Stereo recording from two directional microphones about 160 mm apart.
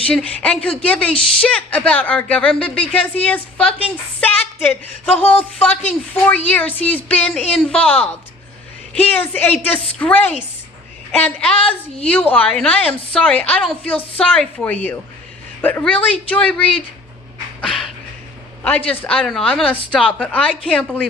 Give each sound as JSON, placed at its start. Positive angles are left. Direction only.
{"t": 0.1, "sound": "a woman's voice", "side_deg": 5}
{"t": 4.2, "sound": "a sound", "side_deg": 10}
{"t": 5.5, "sound": "a woman's voice", "side_deg": 10}
{"t": 11.5, "sound": "a woman's voice", "side_deg": 35}
{"t": 12.0, "sound": "a woman's voice", "side_deg": 10}
{"t": 18.6, "sound": "a woman's voice", "side_deg": 10}